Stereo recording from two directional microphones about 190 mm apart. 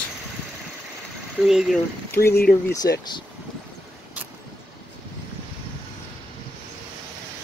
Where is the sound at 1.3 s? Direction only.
Centre (ahead or behind).